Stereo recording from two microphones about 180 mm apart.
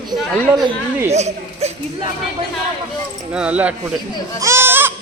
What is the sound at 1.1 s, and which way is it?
Speech, 35° right (ahead or behind).